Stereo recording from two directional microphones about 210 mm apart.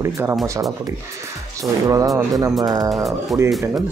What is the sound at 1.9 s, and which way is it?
Speech, 15° right (ahead or behind).